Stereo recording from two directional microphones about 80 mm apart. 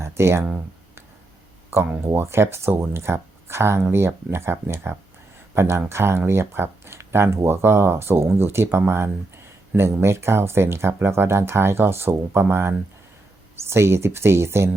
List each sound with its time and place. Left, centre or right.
0.0 s speech: right
1.7 s speech: right